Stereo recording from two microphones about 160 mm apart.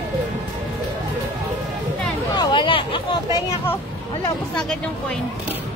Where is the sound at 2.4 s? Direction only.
30° left (ahead or behind).